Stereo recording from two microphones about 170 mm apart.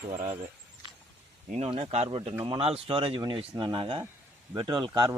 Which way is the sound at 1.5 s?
35° right (ahead or behind).